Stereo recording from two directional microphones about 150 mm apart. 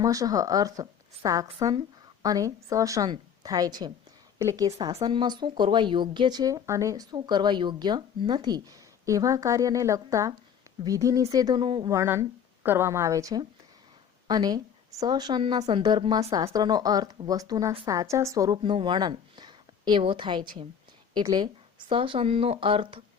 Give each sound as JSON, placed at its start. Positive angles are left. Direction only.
{"t": 0.0, "sound": "speech", "side_deg": -20}
{"t": 11.9, "sound": "speech", "side_deg": -20}